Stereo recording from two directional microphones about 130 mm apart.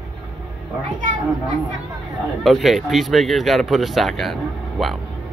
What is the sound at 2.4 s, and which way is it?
Speech, centre (ahead or behind).